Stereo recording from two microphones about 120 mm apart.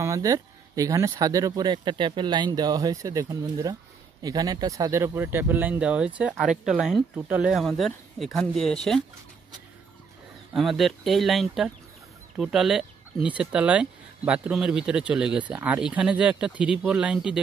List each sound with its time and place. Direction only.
0.0 s speech: 25° right (ahead or behind); by 7.5 s 10° right (ahead or behind)
7.5 s speech: centre (ahead or behind)
10.5 s speech: centre (ahead or behind)